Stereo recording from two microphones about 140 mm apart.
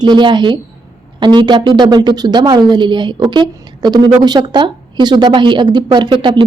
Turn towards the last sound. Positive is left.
turn(degrees=-35)  # may be behind; listen again after turning